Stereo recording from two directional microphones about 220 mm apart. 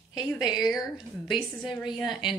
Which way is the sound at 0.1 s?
20° left (ahead or behind).